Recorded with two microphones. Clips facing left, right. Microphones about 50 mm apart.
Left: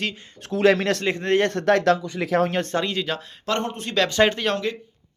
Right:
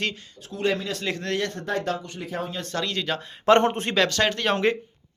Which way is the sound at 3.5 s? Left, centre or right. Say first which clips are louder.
Right 7 dB; right.